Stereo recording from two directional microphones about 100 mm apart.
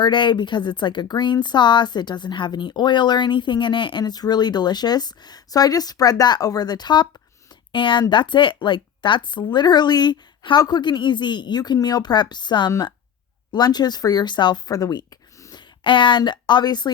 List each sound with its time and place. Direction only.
0.0 s speech: 50° left (ahead or behind); by 15.5 s 35° left (ahead or behind)
15.5 s speech: 55° left (ahead or behind)